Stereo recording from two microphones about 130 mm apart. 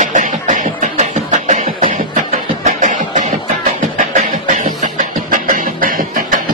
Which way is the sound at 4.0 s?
85° right.